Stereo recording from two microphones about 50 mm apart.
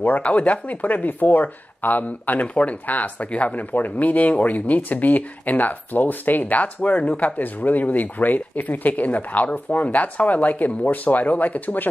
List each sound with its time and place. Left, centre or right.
0.0 s speech: left